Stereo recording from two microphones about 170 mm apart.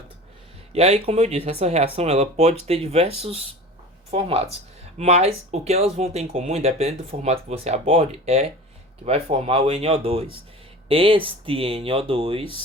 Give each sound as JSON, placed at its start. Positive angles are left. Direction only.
{"t": 0.7, "sound": "speech", "side_deg": -35}